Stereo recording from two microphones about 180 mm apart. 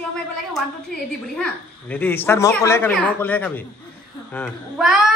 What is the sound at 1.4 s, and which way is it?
A child's voice, 10° left (ahead or behind).